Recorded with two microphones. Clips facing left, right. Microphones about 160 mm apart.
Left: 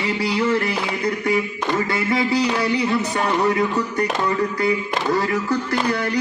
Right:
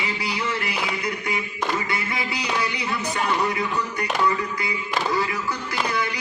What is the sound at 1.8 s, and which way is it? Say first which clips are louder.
Speech: left 8 dB; 35° left (ahead or behind).